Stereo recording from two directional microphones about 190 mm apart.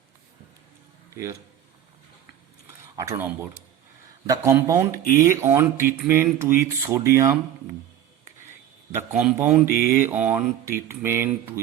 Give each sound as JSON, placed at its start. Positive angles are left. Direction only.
{"t": 1.1, "sound": "a man's voice", "side_deg": -15}
{"t": 2.9, "sound": "speech", "side_deg": -15}
{"t": 8.9, "sound": "speech", "side_deg": -10}
{"t": 9.6, "sound": "mantra", "side_deg": 50}
{"t": 10.1, "sound": "speech", "side_deg": -10}